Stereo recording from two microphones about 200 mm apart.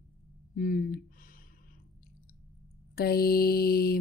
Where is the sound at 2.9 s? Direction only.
50° left (ahead or behind).